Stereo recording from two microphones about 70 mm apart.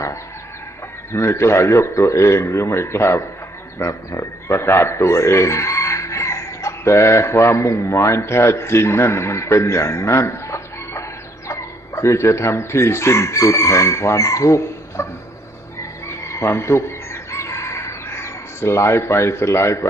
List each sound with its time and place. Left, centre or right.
1.1 s a man's voice: left
15.8 s chicken: left